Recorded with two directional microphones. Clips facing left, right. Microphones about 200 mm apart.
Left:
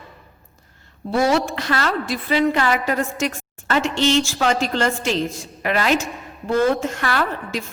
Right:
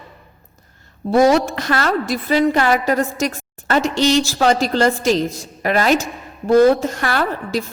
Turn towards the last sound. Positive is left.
turn(degrees=-40)  # may be behind; listen again after turning